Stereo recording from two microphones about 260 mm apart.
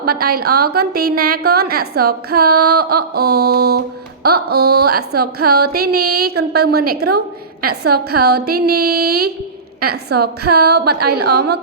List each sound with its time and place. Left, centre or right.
0.0 s speech: right